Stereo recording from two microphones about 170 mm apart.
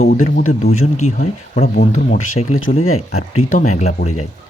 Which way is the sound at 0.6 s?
40° left (ahead or behind).